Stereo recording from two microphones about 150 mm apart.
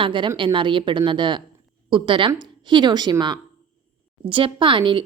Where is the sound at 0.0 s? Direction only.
35° right (ahead or behind).